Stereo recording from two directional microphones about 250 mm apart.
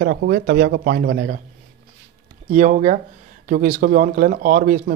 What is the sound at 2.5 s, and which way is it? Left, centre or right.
Speech, right.